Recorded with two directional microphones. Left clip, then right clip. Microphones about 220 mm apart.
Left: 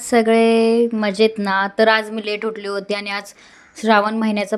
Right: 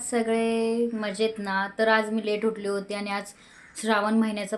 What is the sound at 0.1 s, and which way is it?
Speech, 40° left (ahead or behind).